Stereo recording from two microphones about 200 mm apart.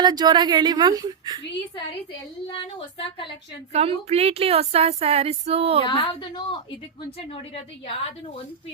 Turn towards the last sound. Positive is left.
turn(degrees=30)  # may be behind; listen again after turning